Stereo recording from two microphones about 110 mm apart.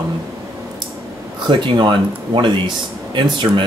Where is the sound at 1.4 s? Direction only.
45° right (ahead or behind).